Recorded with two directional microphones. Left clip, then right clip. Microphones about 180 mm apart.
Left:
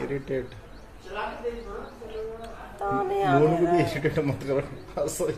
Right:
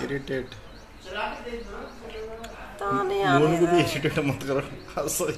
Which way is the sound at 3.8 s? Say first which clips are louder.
Right 1 dB; 15° right (ahead or behind).